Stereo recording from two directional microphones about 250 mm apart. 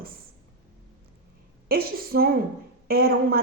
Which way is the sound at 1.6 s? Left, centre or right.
Right.